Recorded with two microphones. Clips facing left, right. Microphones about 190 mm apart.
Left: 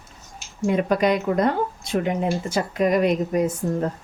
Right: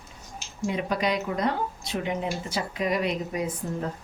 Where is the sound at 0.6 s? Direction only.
50° left (ahead or behind).